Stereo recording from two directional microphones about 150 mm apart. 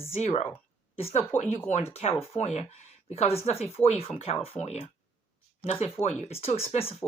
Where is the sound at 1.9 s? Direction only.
40° left (ahead or behind).